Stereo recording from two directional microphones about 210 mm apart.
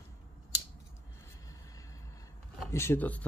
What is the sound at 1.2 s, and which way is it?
Vehicle, 15° left (ahead or behind).